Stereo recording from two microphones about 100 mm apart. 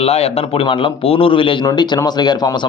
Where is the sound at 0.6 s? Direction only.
55° left (ahead or behind).